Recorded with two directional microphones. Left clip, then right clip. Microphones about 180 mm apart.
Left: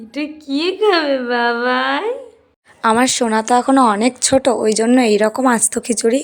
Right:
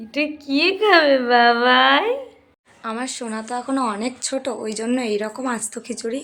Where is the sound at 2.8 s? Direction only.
55° left (ahead or behind).